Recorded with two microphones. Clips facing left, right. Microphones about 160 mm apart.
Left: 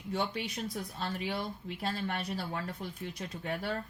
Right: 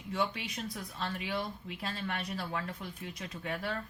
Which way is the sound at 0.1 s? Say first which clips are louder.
Even; 35° left (ahead or behind).